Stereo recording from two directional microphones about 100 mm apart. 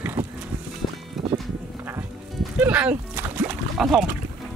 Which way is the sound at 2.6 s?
15° right (ahead or behind).